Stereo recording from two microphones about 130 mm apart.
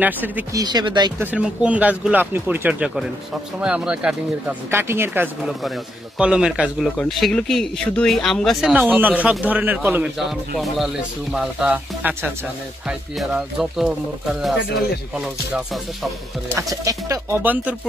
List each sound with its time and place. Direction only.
0.0 s speech: 15° right (ahead or behind)
0.5 s speech: 30° right (ahead or behind)
1.2 s speech: 10° right (ahead or behind)
5.4 s speech: centre (ahead or behind)
8.7 s speech: 15° right (ahead or behind)
16.5 s speech: 25° right (ahead or behind)
17.4 s speech: 15° right (ahead or behind)